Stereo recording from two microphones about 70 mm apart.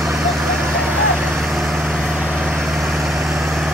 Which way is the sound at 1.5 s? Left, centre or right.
Centre.